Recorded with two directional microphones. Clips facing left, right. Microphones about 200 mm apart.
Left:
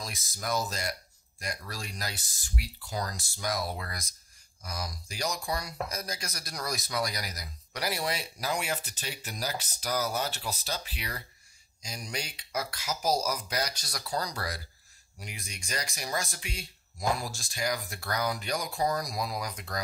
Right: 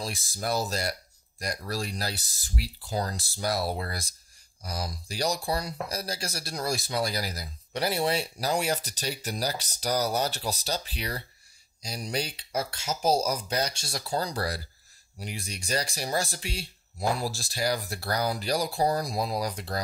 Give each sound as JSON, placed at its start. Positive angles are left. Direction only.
{"t": 0.0, "sound": "speech", "side_deg": -30}